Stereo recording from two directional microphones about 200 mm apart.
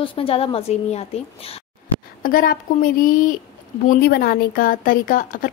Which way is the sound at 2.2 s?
45° left (ahead or behind).